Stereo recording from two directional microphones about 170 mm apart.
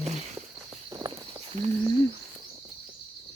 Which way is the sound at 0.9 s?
25° right (ahead or behind).